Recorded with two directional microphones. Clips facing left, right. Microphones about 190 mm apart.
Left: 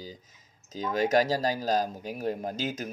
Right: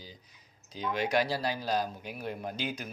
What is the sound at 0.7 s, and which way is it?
Speech, 40° left (ahead or behind).